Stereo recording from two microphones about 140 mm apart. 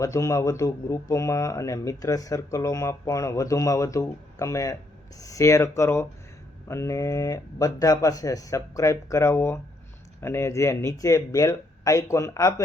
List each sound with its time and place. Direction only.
0.0 s speech: 20° left (ahead or behind)